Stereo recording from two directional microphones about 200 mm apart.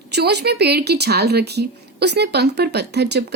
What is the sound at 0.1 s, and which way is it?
A woman's voice, 55° right (ahead or behind).